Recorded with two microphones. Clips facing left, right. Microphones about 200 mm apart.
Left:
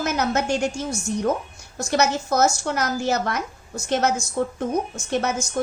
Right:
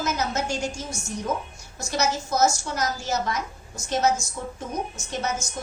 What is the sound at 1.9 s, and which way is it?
A woman's voice, 60° left (ahead or behind).